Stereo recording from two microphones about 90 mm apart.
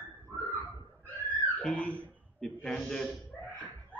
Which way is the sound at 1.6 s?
15° left (ahead or behind).